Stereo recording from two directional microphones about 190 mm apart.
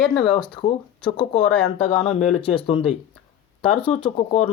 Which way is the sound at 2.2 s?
30° left (ahead or behind).